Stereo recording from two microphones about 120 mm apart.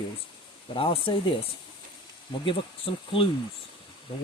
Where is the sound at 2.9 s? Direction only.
50° left (ahead or behind).